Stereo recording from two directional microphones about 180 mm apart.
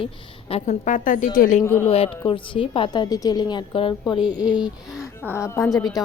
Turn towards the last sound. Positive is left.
turn(degrees=20)  # may be behind; listen again after turning